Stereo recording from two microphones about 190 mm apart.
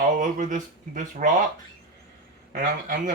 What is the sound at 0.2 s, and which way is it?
Speech, 40° right (ahead or behind).